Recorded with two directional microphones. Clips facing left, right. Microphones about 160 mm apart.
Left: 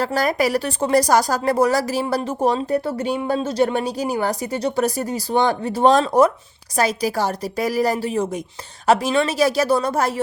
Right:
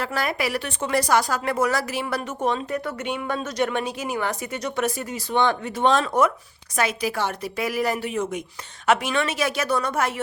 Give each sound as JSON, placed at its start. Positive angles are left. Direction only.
{"t": 0.0, "sound": "speech", "side_deg": 40}